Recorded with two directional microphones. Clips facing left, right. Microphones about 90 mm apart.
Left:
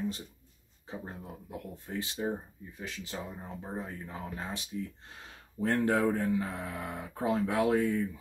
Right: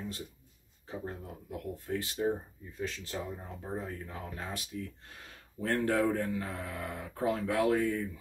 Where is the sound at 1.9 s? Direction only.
20° left (ahead or behind).